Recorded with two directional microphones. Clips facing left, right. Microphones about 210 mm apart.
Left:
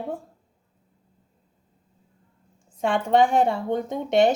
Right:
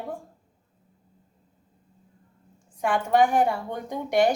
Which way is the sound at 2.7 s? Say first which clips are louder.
Left 2 dB; 25° left (ahead or behind).